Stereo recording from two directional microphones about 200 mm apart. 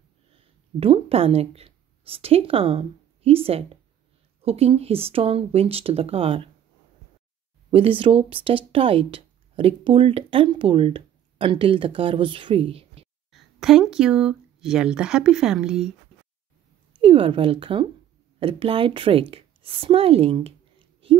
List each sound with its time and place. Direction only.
0.7 s a woman's voice: 30° right (ahead or behind)
7.7 s speech: 25° right (ahead or behind)
13.3 s speech: centre (ahead or behind)
17.0 s speech: 25° right (ahead or behind)
19.3 s a sound: 25° right (ahead or behind)